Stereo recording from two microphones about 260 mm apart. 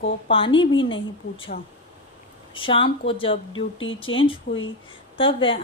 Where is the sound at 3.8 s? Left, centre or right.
Left.